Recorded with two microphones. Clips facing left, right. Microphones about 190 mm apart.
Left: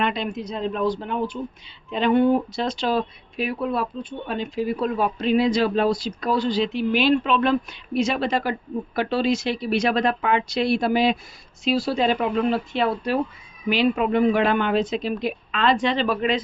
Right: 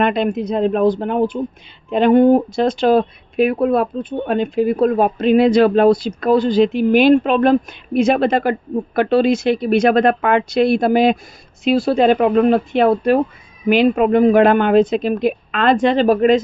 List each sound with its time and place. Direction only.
0.0 s speech: 55° right (ahead or behind)